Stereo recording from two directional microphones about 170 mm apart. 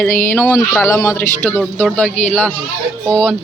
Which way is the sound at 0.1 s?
55° left (ahead or behind).